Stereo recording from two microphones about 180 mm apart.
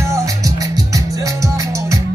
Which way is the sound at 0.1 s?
20° right (ahead or behind).